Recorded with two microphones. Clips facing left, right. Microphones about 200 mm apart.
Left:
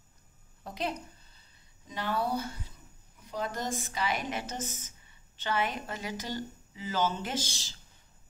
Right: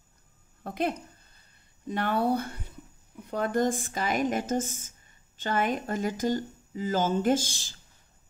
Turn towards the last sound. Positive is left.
turn(degrees=-50)  # may be behind; listen again after turning